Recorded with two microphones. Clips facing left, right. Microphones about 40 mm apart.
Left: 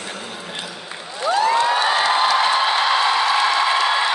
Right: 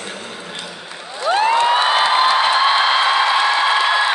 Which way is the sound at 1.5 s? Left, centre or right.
Right.